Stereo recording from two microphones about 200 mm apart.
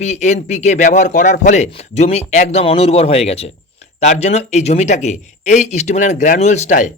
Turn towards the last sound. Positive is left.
turn(degrees=35)  # may be behind; listen again after turning